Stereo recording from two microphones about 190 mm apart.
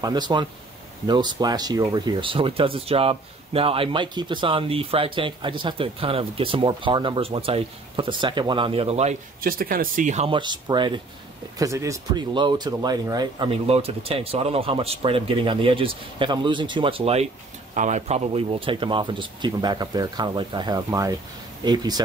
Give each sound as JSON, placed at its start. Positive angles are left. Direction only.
{"t": 0.0, "sound": "speech", "side_deg": -20}
{"t": 9.4, "sound": "speech", "side_deg": -50}